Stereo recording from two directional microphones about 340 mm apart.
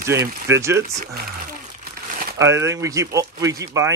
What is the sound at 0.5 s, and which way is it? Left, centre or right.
Speech, centre.